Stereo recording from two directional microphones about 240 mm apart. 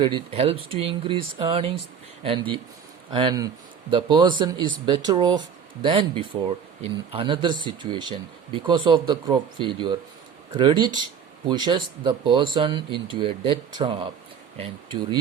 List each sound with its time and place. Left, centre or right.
0.0 s speech: right